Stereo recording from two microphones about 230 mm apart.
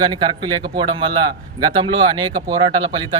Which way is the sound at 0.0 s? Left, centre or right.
Centre.